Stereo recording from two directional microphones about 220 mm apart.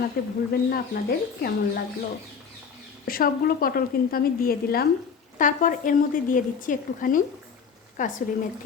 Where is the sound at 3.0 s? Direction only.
40° left (ahead or behind).